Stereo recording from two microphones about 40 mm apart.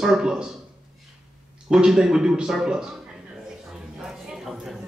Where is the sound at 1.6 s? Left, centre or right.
Centre.